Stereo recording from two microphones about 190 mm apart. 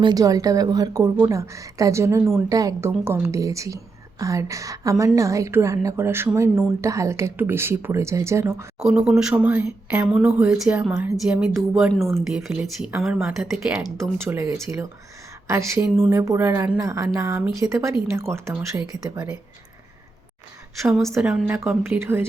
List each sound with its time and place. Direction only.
0.0 s a woman's voice: 20° right (ahead or behind)
8.8 s speech: 5° right (ahead or behind)
14.2 s a woman's voice: 15° right (ahead or behind)
20.8 s a woman's voice: 5° right (ahead or behind)